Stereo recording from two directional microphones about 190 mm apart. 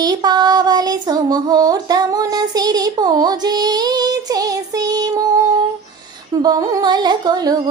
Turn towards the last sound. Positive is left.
turn(degrees=-20)  # may be behind; listen again after turning